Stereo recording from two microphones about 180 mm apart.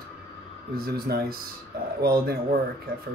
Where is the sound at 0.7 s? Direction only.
55° right (ahead or behind).